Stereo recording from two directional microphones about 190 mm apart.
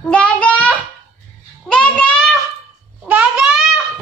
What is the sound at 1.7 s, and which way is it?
Speech, 5° left (ahead or behind).